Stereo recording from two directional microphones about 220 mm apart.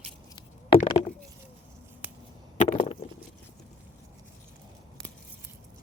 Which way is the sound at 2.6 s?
25° left (ahead or behind).